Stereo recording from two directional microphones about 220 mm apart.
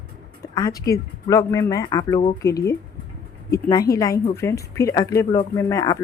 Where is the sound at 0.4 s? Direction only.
15° left (ahead or behind).